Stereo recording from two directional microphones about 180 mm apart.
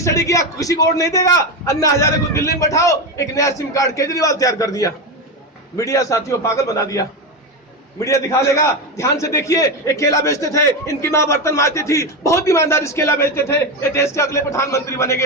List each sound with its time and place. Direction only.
0.0 s a man's voice: 15° left (ahead or behind)